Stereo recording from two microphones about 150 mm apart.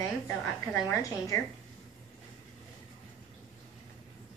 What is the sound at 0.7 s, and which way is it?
Speech, 20° left (ahead or behind).